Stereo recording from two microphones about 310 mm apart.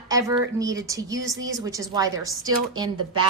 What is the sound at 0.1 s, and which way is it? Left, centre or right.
A woman's voice, centre.